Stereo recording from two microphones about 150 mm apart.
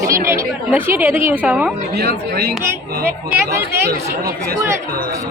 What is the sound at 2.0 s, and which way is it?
Speech, 90° right.